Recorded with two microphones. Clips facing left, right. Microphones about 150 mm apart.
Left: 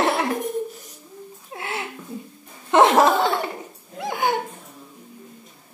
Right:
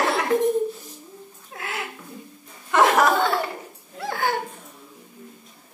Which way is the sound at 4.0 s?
20° left (ahead or behind).